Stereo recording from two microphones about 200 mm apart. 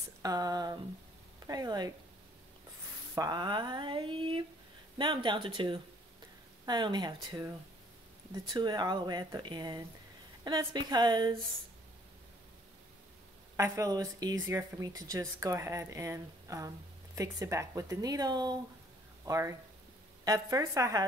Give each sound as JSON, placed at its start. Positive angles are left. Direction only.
{"t": 0.2, "sound": "speech", "side_deg": -20}
{"t": 3.2, "sound": "speech", "side_deg": -20}
{"t": 8.5, "sound": "speech", "side_deg": -20}
{"t": 13.6, "sound": "speech", "side_deg": -15}